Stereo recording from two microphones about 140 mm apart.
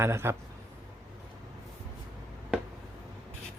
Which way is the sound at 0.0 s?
20° right (ahead or behind).